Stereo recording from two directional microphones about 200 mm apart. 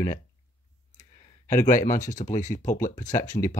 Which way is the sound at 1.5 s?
40° left (ahead or behind).